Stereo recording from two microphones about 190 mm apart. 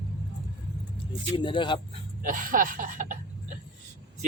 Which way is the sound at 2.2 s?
45° right (ahead or behind).